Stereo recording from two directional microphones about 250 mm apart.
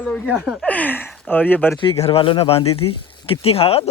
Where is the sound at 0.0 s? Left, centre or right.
Centre.